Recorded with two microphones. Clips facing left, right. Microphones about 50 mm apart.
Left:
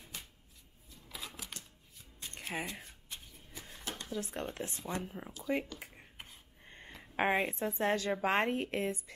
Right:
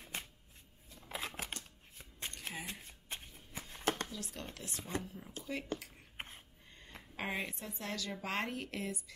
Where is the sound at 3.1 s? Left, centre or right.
Right.